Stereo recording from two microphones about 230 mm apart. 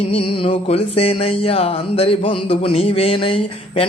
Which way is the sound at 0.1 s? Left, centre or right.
Left.